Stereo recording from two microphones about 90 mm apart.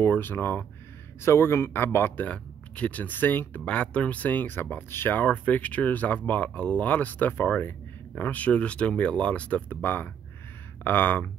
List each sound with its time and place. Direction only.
0.0 s speech: 20° left (ahead or behind)